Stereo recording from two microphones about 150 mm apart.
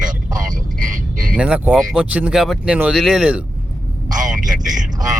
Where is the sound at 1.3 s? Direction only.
10° right (ahead or behind).